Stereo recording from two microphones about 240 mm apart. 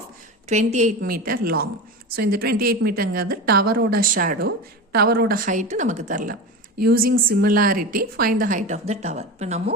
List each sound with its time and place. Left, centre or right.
0.4 s a woman's voice: right